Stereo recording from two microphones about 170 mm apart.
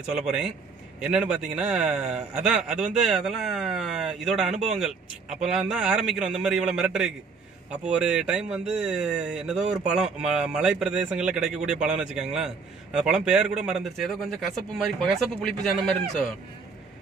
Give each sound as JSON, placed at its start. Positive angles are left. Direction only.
{"t": 0.1, "sound": "speech", "side_deg": -5}